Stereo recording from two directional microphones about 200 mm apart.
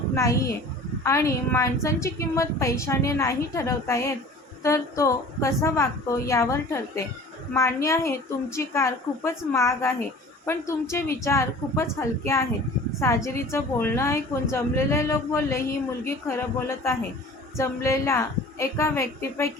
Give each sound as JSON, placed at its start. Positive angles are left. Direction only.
{"t": 0.1, "sound": "a child's voice", "side_deg": 15}